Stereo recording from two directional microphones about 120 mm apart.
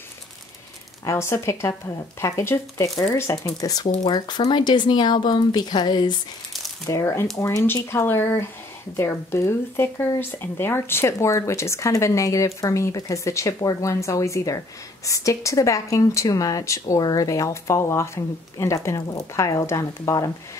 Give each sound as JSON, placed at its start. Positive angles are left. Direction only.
{"t": 1.0, "sound": "speech", "side_deg": 25}